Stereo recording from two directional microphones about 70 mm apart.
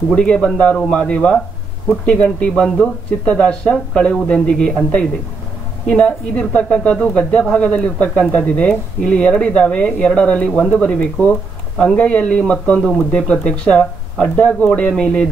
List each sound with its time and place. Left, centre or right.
0.1 s speech: centre